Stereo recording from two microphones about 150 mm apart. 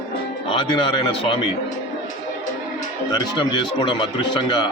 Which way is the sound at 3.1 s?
30° left (ahead or behind).